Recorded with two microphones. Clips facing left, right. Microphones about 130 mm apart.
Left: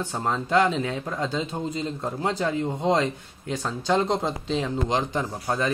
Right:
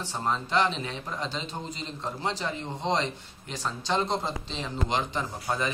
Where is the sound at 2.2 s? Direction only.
50° left (ahead or behind).